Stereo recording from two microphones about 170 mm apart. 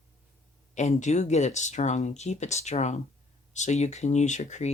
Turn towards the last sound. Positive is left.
turn(degrees=45)  # may be behind; listen again after turning